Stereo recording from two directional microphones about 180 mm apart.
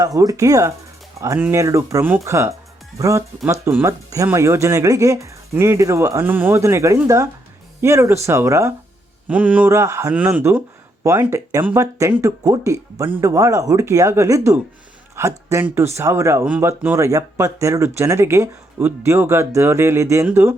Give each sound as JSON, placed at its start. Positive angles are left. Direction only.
{"t": 0.0, "sound": "speech", "side_deg": -20}